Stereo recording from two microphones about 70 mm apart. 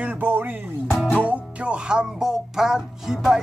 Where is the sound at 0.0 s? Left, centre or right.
Right.